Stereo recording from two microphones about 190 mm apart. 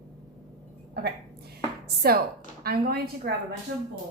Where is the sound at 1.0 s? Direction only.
55° right (ahead or behind).